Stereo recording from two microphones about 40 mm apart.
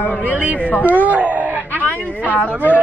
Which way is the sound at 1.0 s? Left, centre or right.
Right.